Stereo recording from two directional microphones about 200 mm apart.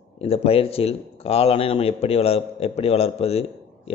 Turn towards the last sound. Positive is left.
turn(degrees=30)  # may be behind; listen again after turning